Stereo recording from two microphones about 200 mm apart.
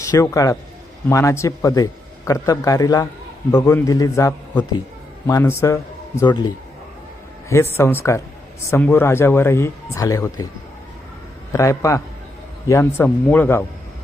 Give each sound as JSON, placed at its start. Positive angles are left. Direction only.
{"t": 0.0, "sound": "a man's voice", "side_deg": 15}
{"t": 7.5, "sound": "a man's voice", "side_deg": 10}
{"t": 11.5, "sound": "a man's voice", "side_deg": 15}